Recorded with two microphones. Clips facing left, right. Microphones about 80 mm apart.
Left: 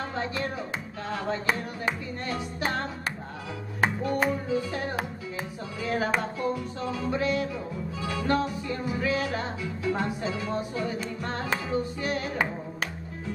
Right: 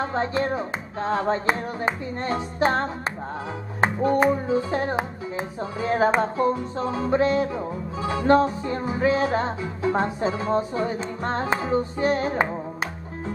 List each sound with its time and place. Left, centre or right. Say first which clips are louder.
0.0 s music: right 7 dB; right